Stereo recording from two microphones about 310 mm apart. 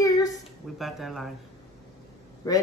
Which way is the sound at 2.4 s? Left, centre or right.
Centre.